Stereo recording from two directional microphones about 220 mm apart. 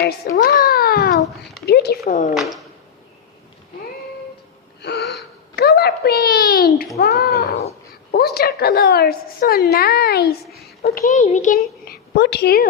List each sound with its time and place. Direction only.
0.3 s cat: 40° left (ahead or behind)
1.6 s a woman's voice: 45° left (ahead or behind)
2.3 s speech: centre (ahead or behind)
4.8 s wheeze: 50° left (ahead or behind)
5.5 s a child's voice: 45° left (ahead or behind)
10.5 s a sound: 45° left (ahead or behind)
11.1 s a child's voice: 30° left (ahead or behind)